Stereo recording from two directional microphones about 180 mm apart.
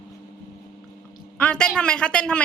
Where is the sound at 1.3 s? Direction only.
5° left (ahead or behind).